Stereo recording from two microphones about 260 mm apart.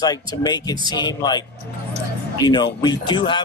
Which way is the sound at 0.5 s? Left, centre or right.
Centre.